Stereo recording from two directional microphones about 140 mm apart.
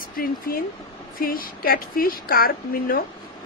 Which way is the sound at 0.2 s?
90° left.